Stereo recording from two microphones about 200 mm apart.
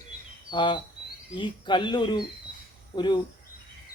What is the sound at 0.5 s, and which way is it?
Speech, 25° left (ahead or behind).